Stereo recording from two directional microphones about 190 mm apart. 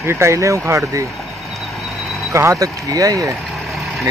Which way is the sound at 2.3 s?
15° right (ahead or behind).